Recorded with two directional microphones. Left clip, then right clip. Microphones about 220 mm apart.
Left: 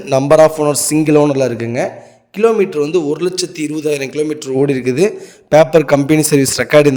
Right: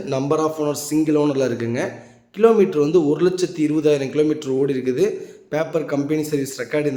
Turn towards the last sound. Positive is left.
turn(degrees=45)  # may be behind; listen again after turning